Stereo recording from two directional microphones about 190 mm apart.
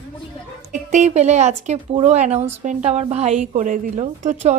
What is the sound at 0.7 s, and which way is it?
A woman's voice, 40° right (ahead or behind).